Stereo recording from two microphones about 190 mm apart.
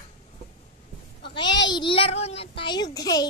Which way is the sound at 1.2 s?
25° left (ahead or behind).